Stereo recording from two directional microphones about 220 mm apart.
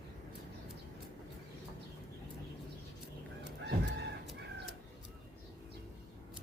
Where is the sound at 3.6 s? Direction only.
50° right (ahead or behind).